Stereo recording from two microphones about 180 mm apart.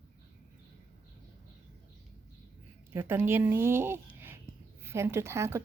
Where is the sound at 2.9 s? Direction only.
15° right (ahead or behind).